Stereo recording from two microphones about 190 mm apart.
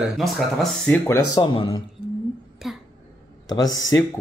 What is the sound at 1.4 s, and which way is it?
Speech, 25° left (ahead or behind).